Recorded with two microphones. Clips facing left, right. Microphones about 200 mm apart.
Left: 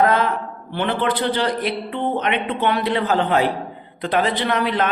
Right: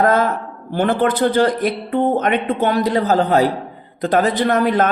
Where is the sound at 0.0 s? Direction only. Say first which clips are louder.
Right 2 dB; 45° right (ahead or behind).